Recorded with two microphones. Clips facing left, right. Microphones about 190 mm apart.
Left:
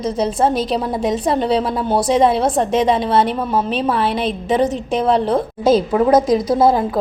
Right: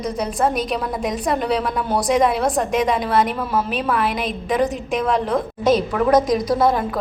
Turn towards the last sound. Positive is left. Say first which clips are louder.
# left 4 dB
turn(degrees=25)  # may be behind; listen again after turning